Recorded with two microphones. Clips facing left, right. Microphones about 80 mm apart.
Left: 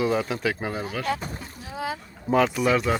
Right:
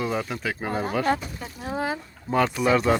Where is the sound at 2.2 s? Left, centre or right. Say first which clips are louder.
Left 1 dB; centre.